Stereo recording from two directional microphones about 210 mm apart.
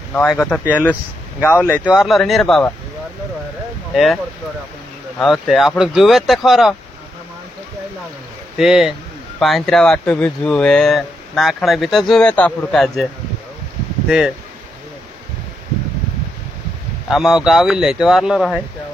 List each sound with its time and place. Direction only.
0.1 s speech: 10° left (ahead or behind)
3.9 s speech: centre (ahead or behind)
5.2 s speech: centre (ahead or behind)
8.5 s speech: centre (ahead or behind)
17.1 s speech: centre (ahead or behind)